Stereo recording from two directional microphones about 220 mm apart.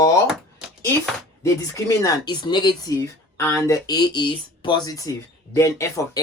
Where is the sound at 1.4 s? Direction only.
15° left (ahead or behind).